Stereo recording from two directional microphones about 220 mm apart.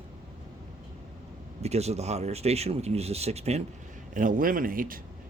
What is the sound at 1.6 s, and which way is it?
Speech, 30° right (ahead or behind).